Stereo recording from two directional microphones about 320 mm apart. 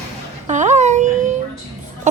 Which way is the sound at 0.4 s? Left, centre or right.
Right.